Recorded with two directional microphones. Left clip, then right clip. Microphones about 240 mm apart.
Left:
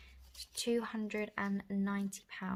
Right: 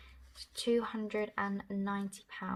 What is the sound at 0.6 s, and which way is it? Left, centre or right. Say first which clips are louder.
Speech: right 3 dB; left.